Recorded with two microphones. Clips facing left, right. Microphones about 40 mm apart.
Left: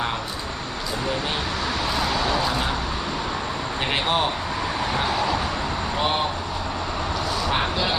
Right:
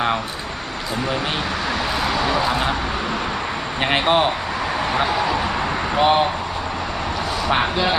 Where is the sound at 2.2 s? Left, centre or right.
Right.